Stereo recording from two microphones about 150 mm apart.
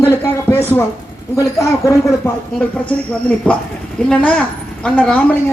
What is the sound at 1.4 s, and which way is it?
Speech, 20° left (ahead or behind).